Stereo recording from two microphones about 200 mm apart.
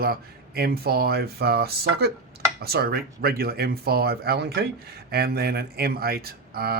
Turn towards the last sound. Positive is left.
turn(degrees=-50)  # may be behind; listen again after turning